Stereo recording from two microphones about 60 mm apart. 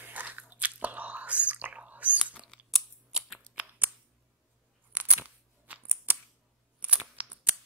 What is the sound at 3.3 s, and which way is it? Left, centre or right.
Scissors, right.